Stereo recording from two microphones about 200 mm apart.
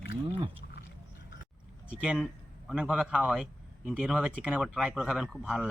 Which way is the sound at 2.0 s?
Centre (ahead or behind).